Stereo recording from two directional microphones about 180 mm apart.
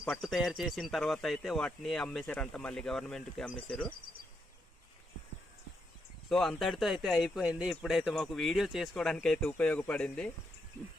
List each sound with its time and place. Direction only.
0.0 s speech: centre (ahead or behind)
6.2 s speech: centre (ahead or behind)